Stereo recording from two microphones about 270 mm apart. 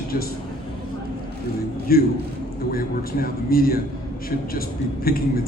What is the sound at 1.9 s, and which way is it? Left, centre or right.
A man's voice, left.